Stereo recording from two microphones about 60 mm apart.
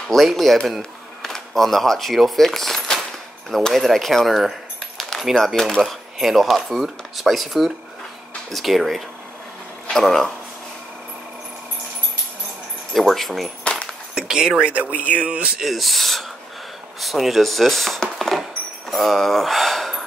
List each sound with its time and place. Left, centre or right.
0.1 s speech: centre
0.7 s a sound: centre
3.7 s speech: centre
12.9 s speech: centre
14.1 s speech: centre
14.7 s speech: right
15.6 s speech: centre
18.4 s keys jangling: centre